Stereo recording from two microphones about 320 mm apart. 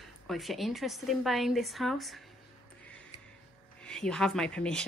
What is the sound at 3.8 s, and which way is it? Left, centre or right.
A woman's voice, centre.